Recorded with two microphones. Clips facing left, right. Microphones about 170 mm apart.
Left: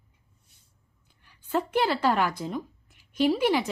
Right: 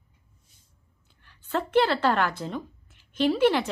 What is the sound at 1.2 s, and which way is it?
A woman's voice, 10° left (ahead or behind).